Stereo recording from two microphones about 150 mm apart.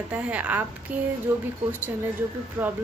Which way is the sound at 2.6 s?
20° right (ahead or behind).